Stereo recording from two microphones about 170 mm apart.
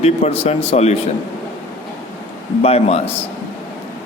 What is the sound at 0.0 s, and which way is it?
Speech, 40° left (ahead or behind).